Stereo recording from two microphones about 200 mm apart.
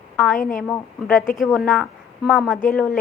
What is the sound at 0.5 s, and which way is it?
A woman's voice, 5° left (ahead or behind).